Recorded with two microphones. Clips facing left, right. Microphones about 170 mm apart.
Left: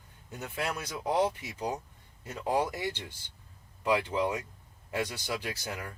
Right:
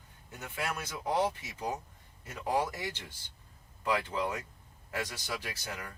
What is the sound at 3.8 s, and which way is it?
Speech, 20° left (ahead or behind).